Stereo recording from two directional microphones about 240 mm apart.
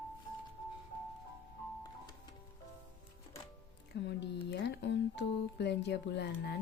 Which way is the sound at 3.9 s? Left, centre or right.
Left.